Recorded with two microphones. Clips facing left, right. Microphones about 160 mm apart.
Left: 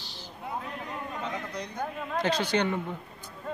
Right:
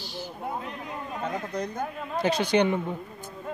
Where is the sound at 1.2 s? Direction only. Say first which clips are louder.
Right 5 dB; 50° right (ahead or behind).